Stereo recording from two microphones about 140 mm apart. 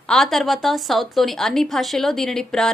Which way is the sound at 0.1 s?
Centre (ahead or behind).